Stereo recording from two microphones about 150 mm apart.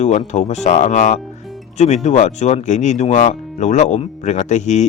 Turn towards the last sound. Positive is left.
turn(degrees=50)  # may be behind; listen again after turning